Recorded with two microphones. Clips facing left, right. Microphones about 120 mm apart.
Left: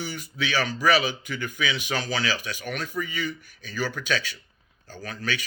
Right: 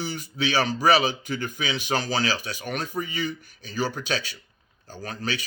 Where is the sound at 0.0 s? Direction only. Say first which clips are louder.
Right 3 dB; 35° right (ahead or behind).